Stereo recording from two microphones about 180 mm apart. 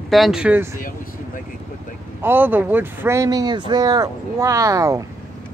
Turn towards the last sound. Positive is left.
turn(degrees=-20)  # may be behind; listen again after turning